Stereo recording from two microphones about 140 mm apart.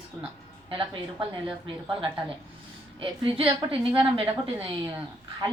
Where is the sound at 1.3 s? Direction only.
35° right (ahead or behind).